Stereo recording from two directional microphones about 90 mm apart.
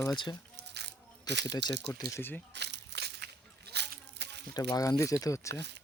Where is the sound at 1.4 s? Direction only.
50° left (ahead or behind).